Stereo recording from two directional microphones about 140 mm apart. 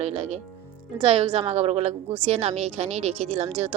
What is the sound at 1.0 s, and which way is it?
Speech, 40° right (ahead or behind).